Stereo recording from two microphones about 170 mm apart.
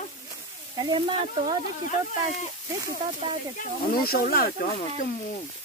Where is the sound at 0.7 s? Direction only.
30° right (ahead or behind).